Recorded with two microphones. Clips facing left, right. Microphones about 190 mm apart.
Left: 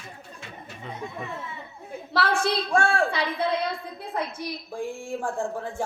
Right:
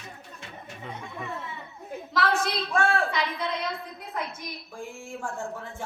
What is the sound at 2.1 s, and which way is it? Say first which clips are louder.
A woman's voice: left 2 dB; 30° left (ahead or behind).